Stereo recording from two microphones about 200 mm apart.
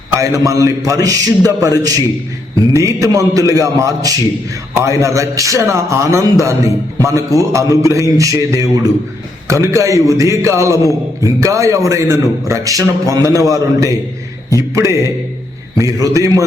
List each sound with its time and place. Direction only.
0.2 s a man's voice: 15° right (ahead or behind)
15.8 s a man's voice: 15° right (ahead or behind)